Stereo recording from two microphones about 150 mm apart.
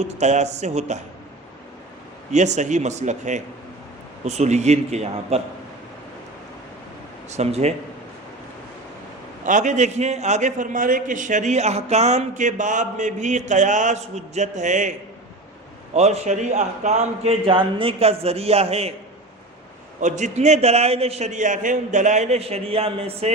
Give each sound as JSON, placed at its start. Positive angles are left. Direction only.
{"t": 0.0, "sound": "a man's voice", "side_deg": -50}
{"t": 2.3, "sound": "a man's voice", "side_deg": -50}
{"t": 7.3, "sound": "speech", "side_deg": -45}
{"t": 9.4, "sound": "a man's voice", "side_deg": -55}
{"t": 16.0, "sound": "a man's voice", "side_deg": -45}
{"t": 17.4, "sound": "a man's voice", "side_deg": -35}
{"t": 20.0, "sound": "a man's voice", "side_deg": -55}